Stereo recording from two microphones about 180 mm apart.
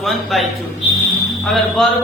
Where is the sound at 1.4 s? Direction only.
Centre (ahead or behind).